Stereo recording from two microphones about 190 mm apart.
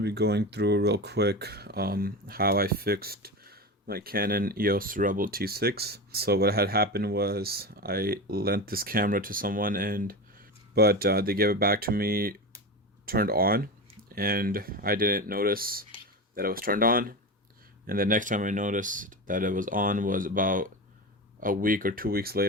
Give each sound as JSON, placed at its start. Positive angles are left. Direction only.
{"t": 0.0, "sound": "speech", "side_deg": -60}